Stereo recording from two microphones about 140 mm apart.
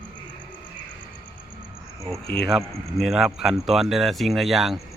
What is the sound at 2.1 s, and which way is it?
Speech, centre (ahead or behind).